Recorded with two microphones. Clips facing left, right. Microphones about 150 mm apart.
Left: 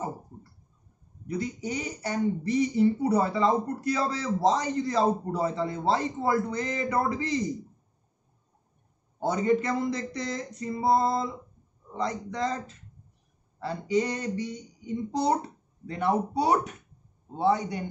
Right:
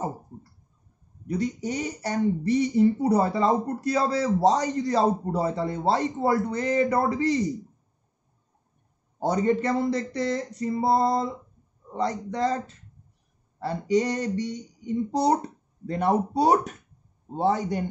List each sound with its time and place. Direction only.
1.2 s speech: 35° right (ahead or behind)
9.2 s speech: 35° right (ahead or behind)